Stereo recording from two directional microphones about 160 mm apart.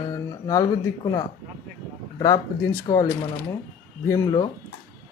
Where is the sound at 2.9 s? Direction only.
25° left (ahead or behind).